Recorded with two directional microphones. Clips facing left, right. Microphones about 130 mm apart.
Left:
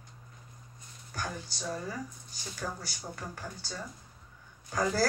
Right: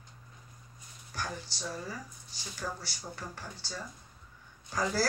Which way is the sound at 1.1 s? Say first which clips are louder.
Left 1 dB; 45° left (ahead or behind).